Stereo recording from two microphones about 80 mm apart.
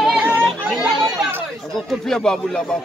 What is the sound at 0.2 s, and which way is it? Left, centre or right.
Chatter, right.